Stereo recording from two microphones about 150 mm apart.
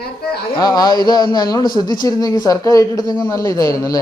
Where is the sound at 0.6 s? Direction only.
25° left (ahead or behind).